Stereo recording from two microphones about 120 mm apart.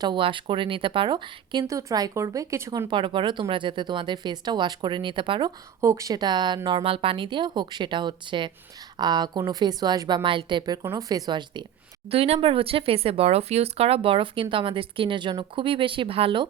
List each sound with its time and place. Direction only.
0.0 s speech: 45° right (ahead or behind)
1.6 s speech: 30° right (ahead or behind)
2.9 s speech: 45° right (ahead or behind)
5.8 s speech: 30° right (ahead or behind)
10.2 s speech: 45° right (ahead or behind)
12.0 s speech: 55° right (ahead or behind)